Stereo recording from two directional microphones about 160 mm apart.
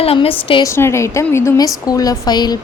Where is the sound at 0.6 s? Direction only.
15° left (ahead or behind).